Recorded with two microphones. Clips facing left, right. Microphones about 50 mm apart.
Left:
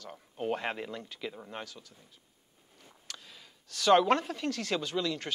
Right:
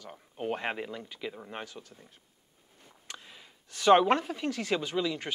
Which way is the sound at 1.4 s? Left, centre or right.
Right.